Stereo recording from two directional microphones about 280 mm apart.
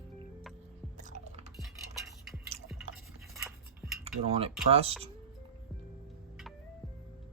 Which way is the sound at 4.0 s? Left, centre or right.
Centre.